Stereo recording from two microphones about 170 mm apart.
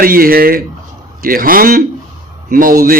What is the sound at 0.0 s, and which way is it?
Speech, 60° right (ahead or behind).